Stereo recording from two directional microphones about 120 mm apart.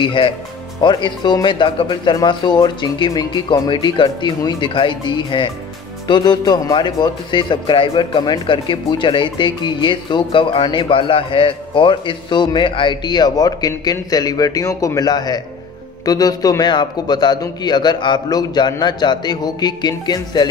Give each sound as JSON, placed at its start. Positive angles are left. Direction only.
{"t": 0.0, "sound": "speech", "side_deg": 45}